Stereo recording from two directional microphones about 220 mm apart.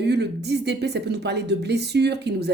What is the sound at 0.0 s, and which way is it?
A woman's voice, 50° right (ahead or behind).